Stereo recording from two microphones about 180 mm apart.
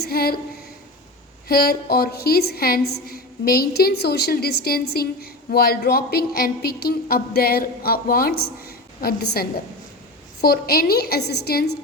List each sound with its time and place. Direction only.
0.0 s a woman's voice: 60° left (ahead or behind)
1.5 s a woman's voice: 60° left (ahead or behind)